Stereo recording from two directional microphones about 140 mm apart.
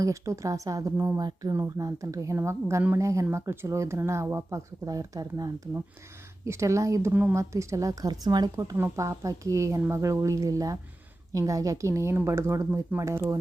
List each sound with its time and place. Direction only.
0.0 s speech: 20° right (ahead or behind)